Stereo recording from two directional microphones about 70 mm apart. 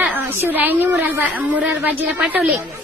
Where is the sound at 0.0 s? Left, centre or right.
Centre.